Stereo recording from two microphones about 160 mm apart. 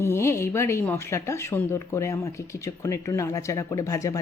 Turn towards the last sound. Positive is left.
turn(degrees=20)  # may be behind; listen again after turning